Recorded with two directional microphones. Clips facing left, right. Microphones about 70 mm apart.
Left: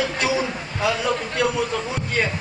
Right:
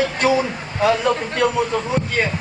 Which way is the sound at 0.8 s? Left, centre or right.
Right.